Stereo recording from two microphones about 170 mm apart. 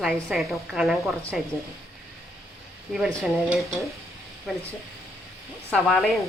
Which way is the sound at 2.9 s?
Centre (ahead or behind).